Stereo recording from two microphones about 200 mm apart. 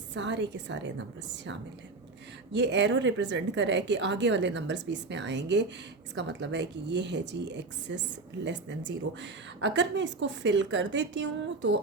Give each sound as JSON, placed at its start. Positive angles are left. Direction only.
{"t": 0.1, "sound": "a woman's voice", "side_deg": -65}
{"t": 2.5, "sound": "a woman's voice", "side_deg": -60}